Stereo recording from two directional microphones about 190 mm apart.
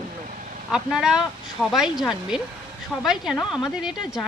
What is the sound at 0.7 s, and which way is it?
Speech, 5° right (ahead or behind).